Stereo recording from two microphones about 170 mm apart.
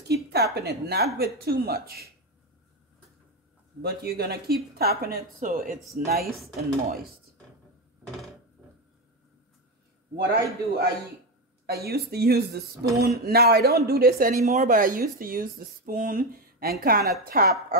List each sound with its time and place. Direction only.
0.1 s a woman's voice: 70° right (ahead or behind)
3.8 s speech: 70° right (ahead or behind)
5.5 s speech: 50° right (ahead or behind)
10.1 s speech: 70° right (ahead or behind)
14.4 s speech: 50° right (ahead or behind)